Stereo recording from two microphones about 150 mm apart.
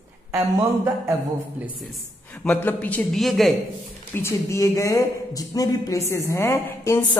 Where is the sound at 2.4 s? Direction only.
10° left (ahead or behind).